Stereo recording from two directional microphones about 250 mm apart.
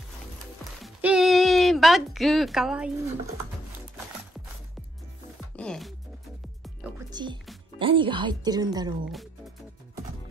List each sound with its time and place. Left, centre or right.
0.8 s music: centre
5.6 s speech: centre
7.1 s speech: centre